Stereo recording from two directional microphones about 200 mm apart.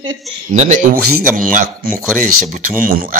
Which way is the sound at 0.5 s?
40° right (ahead or behind).